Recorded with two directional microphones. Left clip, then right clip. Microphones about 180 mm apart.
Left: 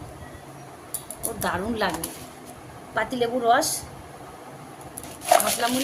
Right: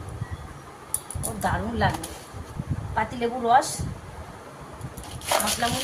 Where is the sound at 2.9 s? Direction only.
65° left (ahead or behind).